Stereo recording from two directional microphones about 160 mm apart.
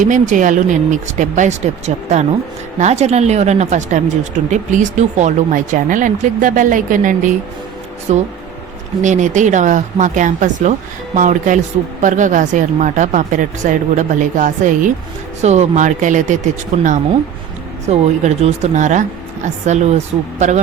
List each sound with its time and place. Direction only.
0.0 s speech: 55° right (ahead or behind)
8.1 s speech: 45° right (ahead or behind)
17.8 s speech: 45° right (ahead or behind)